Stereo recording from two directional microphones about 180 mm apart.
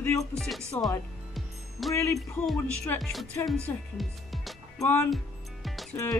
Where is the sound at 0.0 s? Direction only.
15° left (ahead or behind).